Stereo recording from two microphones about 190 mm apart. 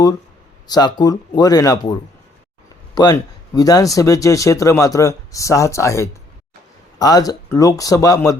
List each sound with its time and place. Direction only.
0.7 s speech: 20° left (ahead or behind)